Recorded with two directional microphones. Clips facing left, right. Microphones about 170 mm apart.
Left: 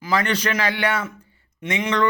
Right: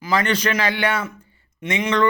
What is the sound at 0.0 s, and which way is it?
A man's voice, 20° right (ahead or behind).